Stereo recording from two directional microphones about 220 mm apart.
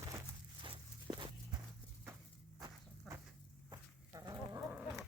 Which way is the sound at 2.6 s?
10° right (ahead or behind).